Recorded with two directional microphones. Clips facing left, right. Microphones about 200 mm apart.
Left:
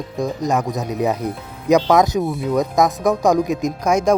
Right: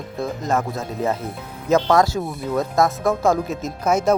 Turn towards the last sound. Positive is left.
turn(degrees=-5)  # may be behind; listen again after turning